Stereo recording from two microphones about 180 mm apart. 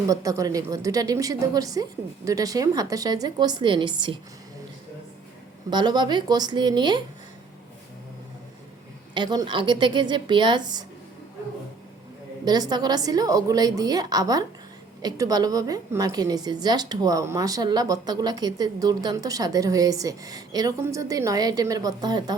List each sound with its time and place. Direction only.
0.1 s a woman's voice: 20° right (ahead or behind)
5.7 s a woman's voice: 25° right (ahead or behind)
9.1 s a woman's voice: 25° right (ahead or behind)
12.5 s a woman's voice: 20° right (ahead or behind)